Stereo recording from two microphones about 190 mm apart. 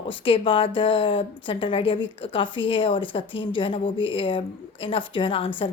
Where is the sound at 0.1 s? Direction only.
25° left (ahead or behind).